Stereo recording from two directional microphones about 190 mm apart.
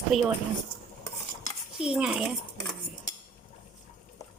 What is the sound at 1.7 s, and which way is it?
Dishes, 5° right (ahead or behind).